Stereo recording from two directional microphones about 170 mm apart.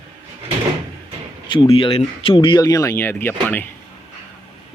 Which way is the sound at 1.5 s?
30° left (ahead or behind).